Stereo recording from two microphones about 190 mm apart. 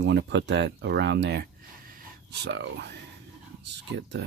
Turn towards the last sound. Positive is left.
turn(degrees=-65)  # may be behind; listen again after turning